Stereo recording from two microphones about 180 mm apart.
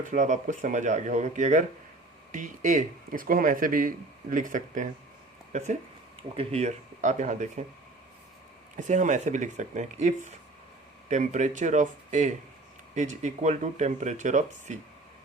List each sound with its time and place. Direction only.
0.0 s speech: 45° right (ahead or behind)
8.7 s speech: 45° right (ahead or behind)